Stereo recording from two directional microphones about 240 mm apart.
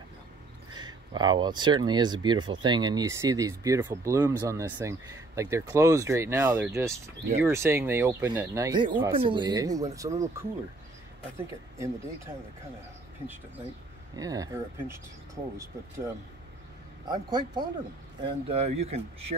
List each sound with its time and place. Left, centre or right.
0.7 s speech: centre
14.1 s speech: centre
17.1 s speech: centre